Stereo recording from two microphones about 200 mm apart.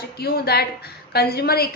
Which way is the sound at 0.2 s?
50° left (ahead or behind).